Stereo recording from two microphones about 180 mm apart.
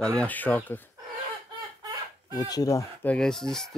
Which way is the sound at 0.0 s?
5° left (ahead or behind).